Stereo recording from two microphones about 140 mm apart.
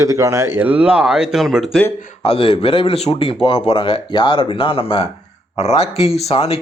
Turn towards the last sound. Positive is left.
turn(degrees=45)  # may be behind; listen again after turning